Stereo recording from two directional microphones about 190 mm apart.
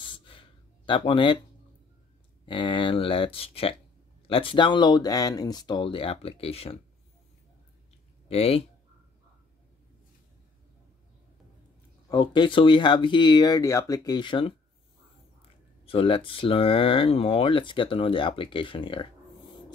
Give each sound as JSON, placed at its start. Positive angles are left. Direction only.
{"t": 0.0, "sound": "a sound", "side_deg": 25}
{"t": 2.4, "sound": "speech", "side_deg": 25}
{"t": 8.3, "sound": "speech", "side_deg": 30}
{"t": 12.1, "sound": "speech", "side_deg": 25}
{"t": 15.8, "sound": "speech", "side_deg": 30}